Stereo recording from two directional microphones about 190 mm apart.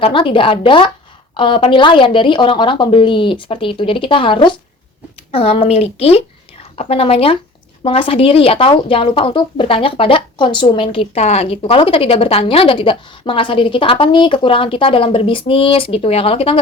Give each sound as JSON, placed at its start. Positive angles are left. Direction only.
{"t": 0.0, "sound": "speech", "side_deg": 25}